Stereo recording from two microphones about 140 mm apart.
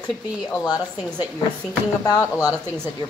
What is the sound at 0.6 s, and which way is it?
A woman's voice, 30° left (ahead or behind).